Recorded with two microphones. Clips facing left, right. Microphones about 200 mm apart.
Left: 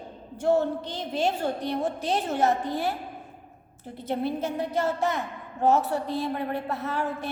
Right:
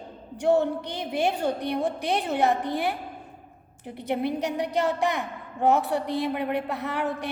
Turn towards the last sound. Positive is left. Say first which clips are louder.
# right 1 dB
turn(degrees=-15)  # may be behind; listen again after turning